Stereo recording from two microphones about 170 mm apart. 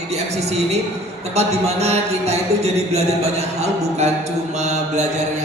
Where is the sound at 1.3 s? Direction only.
40° right (ahead or behind).